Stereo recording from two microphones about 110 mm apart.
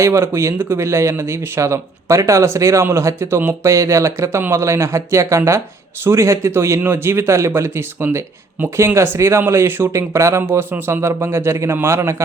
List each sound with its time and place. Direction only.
0.0 s speech: 25° right (ahead or behind)